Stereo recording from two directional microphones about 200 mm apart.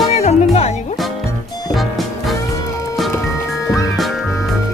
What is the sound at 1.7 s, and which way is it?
Music, centre (ahead or behind).